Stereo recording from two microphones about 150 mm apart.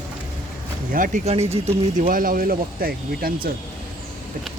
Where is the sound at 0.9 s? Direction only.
65° right (ahead or behind).